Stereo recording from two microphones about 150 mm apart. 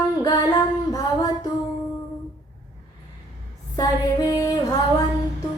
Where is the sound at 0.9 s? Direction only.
25° left (ahead or behind).